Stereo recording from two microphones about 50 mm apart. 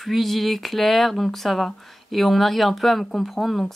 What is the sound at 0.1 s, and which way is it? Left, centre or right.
Speech, centre.